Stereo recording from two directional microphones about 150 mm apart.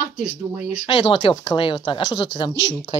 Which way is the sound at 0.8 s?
35° left (ahead or behind).